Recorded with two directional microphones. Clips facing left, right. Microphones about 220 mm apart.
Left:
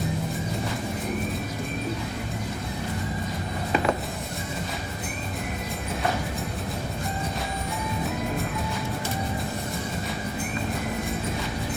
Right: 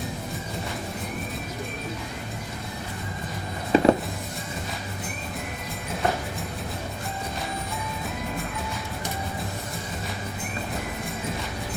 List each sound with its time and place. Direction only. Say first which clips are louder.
3.7 s music: right 6 dB; 30° right (ahead or behind)